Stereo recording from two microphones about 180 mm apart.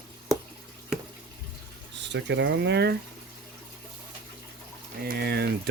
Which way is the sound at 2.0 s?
80° right.